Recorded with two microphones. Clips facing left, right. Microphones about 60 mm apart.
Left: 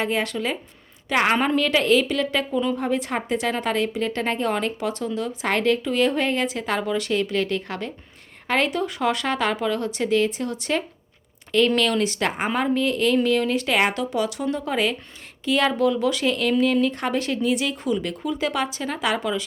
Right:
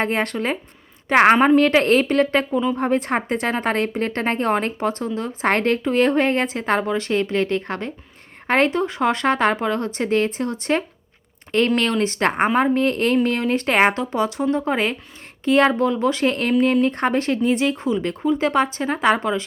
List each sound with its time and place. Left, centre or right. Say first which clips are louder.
0.0 s speech: right 2 dB; right
1.6 s speech: right 3 dB; right
2.5 s a woman's voice: right 2 dB; centre
2.7 s speech: right 4 dB; right
11.8 s speech: right 1 dB; right
12.0 s speech: right 5 dB; right
12.5 s speech: right 4 dB; right